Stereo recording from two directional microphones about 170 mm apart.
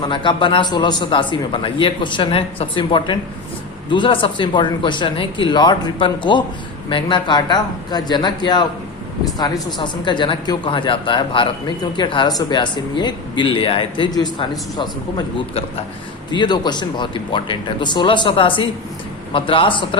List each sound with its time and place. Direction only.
0.1 s a man's voice: 30° left (ahead or behind)
16.3 s a man's voice: 25° left (ahead or behind)